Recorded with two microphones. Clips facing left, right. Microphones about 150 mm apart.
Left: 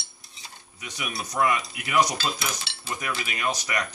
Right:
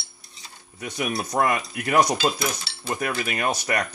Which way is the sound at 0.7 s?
55° right (ahead or behind).